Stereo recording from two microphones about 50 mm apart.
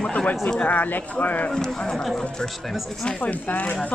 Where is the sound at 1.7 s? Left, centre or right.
Centre.